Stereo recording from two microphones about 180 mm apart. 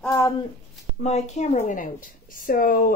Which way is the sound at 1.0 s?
40° left (ahead or behind).